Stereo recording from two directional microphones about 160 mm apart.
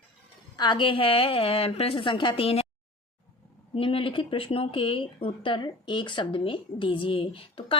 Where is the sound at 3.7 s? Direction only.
35° left (ahead or behind).